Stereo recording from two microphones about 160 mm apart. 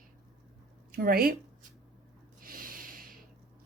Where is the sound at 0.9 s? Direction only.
65° right (ahead or behind).